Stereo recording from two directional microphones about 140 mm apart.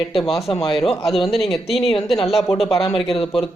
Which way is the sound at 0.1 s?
Centre (ahead or behind).